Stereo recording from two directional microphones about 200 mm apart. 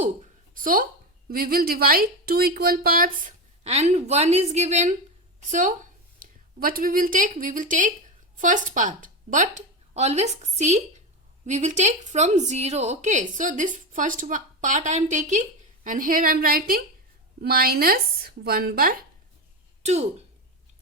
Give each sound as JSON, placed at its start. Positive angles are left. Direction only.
{"t": 0.0, "sound": "a sound", "side_deg": -40}
{"t": 1.3, "sound": "speech", "side_deg": -45}
{"t": 19.8, "sound": "speech", "side_deg": -35}